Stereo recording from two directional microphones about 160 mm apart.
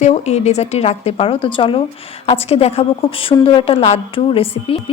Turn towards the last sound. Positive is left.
turn(degrees=35)  # may be behind; listen again after turning